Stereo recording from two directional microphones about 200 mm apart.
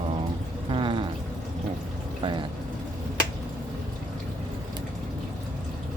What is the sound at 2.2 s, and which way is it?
Vehicle, 25° right (ahead or behind).